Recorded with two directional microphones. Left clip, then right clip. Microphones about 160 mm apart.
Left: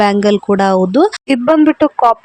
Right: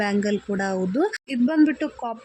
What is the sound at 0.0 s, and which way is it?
Speech, 55° left (ahead or behind).